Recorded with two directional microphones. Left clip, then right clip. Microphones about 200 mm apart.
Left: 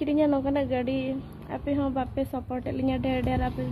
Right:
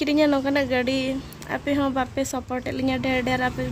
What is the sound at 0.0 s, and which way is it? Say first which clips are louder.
A woman's voice: right 4 dB; 15° right (ahead or behind).